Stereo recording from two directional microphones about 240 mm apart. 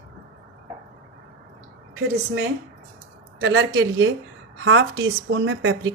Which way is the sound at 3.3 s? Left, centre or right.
Right.